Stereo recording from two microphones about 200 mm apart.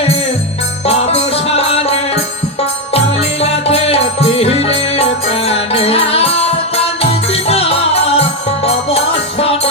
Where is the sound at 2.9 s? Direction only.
30° left (ahead or behind).